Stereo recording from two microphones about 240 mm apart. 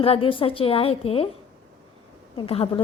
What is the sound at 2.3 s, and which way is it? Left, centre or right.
Speech, left.